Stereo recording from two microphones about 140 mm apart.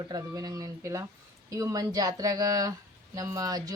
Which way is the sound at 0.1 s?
25° right (ahead or behind).